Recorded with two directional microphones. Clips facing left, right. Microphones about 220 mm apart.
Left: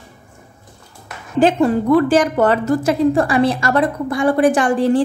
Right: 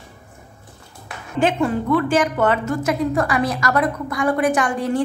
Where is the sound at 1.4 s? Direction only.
40° left (ahead or behind).